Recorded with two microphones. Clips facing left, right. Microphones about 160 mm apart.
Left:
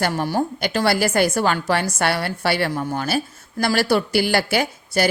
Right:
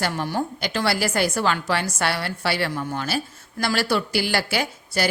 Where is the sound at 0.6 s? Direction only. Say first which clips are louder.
Left 4 dB; 50° left (ahead or behind).